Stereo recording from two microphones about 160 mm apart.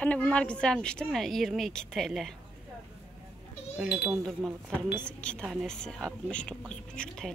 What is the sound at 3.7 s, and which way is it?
Speech, 5° right (ahead or behind).